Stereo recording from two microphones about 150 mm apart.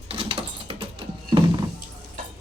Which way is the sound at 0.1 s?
40° right (ahead or behind).